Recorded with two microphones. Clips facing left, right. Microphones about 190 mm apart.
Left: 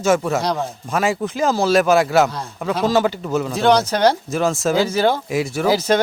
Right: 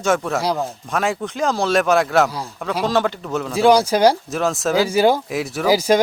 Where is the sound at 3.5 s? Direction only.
10° right (ahead or behind).